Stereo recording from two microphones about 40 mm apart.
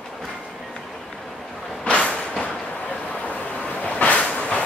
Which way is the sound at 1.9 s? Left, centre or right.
Left.